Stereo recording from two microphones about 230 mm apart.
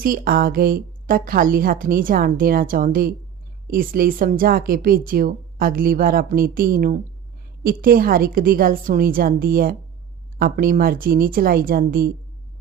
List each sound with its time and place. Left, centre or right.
0.0 s a woman's voice: right